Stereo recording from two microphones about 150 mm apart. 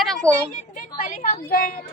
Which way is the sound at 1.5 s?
75° left (ahead or behind).